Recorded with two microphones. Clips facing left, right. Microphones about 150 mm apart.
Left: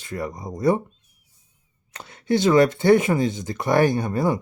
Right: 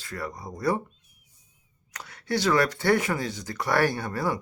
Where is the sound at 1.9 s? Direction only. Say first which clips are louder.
Left 7 dB; 25° left (ahead or behind).